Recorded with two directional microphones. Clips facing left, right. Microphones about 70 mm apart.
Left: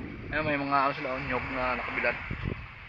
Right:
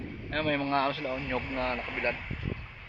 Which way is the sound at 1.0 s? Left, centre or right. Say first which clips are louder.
Left 1 dB; left.